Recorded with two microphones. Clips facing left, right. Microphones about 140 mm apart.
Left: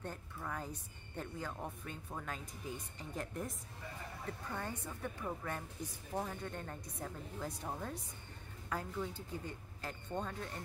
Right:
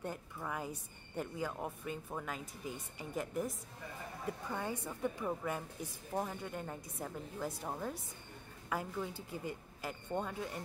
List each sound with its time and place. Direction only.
0.0 s a woman's voice: 10° right (ahead or behind)